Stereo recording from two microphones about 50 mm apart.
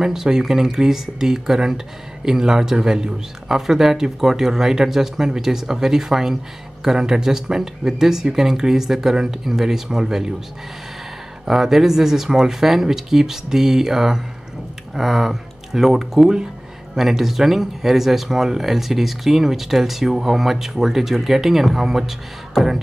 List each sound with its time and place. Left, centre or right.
0.0 s speech: centre
11.4 s speech: centre